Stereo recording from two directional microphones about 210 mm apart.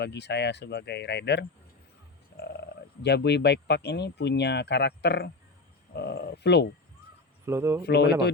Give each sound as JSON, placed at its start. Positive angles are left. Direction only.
{"t": 0.0, "sound": "speech", "side_deg": 55}
{"t": 2.3, "sound": "music", "side_deg": 55}
{"t": 3.0, "sound": "speech", "side_deg": 55}
{"t": 7.4, "sound": "speech", "side_deg": -10}
{"t": 7.9, "sound": "speech", "side_deg": 50}